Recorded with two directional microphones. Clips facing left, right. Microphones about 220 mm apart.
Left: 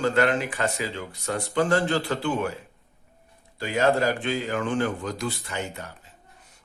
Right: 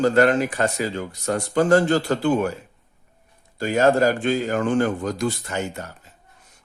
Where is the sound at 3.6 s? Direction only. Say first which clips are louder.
Right 5 dB; 45° right (ahead or behind).